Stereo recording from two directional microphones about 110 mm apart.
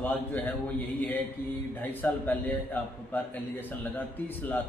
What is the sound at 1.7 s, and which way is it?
A man's voice, 15° left (ahead or behind).